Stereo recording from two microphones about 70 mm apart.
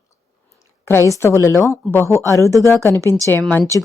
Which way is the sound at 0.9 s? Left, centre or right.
Left.